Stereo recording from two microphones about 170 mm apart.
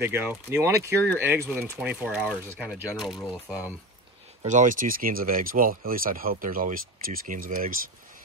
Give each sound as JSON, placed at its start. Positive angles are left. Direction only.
{"t": 0.0, "sound": "speech", "side_deg": -15}
{"t": 4.5, "sound": "speech", "side_deg": -50}